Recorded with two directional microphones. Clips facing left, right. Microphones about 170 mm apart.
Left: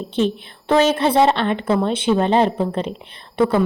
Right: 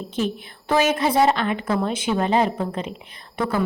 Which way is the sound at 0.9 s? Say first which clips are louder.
Left 3 dB; 30° left (ahead or behind).